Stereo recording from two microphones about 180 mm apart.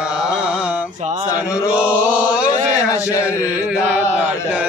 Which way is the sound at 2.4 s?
40° right (ahead or behind).